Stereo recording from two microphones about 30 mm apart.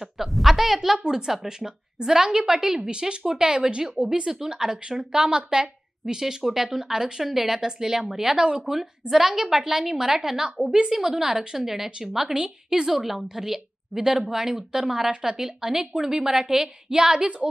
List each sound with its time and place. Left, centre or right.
0.3 s a sound: centre
0.9 s a woman's voice: centre
2.9 s a woman's voice: right
7.2 s a woman's voice: centre
8.4 s speech: right
9.4 s a woman's voice: centre
12.4 s speech: right
12.9 s a woman's voice: centre; by 17.1 s right